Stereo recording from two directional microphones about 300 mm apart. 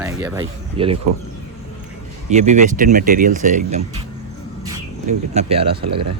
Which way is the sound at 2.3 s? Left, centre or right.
Right.